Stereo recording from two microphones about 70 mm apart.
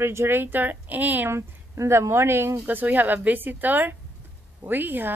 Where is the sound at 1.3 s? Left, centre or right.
Right.